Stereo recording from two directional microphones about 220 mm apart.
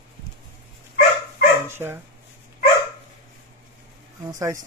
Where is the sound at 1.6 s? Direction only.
10° right (ahead or behind).